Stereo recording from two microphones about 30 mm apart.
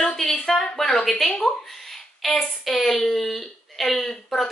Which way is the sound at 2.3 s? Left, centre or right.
Centre.